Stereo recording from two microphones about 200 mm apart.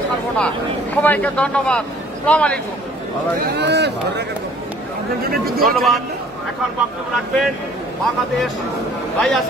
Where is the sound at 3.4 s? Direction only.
55° right (ahead or behind).